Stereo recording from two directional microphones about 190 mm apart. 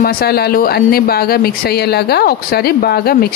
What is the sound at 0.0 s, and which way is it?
Speech, 55° left (ahead or behind).